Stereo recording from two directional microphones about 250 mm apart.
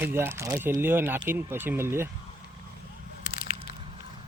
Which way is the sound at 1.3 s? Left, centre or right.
Centre.